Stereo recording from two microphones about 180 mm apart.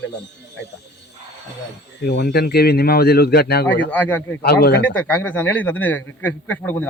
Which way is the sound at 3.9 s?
10° left (ahead or behind).